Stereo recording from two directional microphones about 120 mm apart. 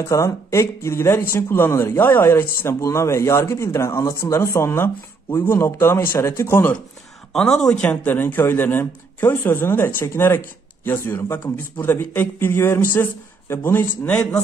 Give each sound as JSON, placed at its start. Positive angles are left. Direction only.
{"t": 0.0, "sound": "speech", "side_deg": 25}
{"t": 7.3, "sound": "speech", "side_deg": 5}
{"t": 7.8, "sound": "speech", "side_deg": 15}